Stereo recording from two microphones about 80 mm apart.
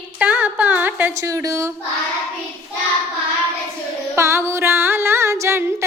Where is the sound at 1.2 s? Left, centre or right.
Right.